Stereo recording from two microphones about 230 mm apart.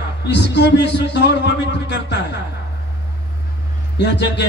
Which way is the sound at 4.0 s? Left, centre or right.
Left.